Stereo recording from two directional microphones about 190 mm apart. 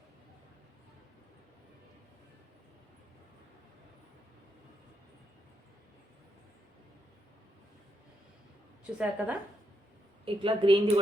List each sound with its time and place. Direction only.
9.0 s a woman's voice: 5° right (ahead or behind)
10.2 s a woman's voice: 25° right (ahead or behind)